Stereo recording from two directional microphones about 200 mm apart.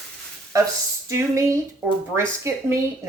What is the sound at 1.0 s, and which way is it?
Speech, 15° right (ahead or behind).